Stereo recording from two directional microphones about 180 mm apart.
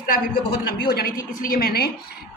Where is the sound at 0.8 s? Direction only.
55° left (ahead or behind).